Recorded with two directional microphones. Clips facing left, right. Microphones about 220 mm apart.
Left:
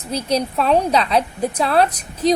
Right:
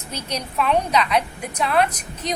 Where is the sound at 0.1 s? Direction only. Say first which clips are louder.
Left 9 dB; 35° left (ahead or behind).